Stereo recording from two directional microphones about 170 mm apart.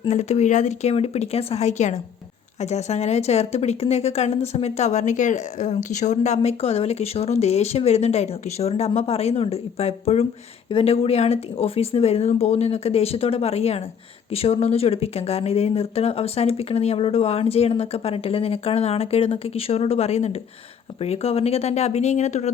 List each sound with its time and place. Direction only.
0.1 s speech: 40° left (ahead or behind)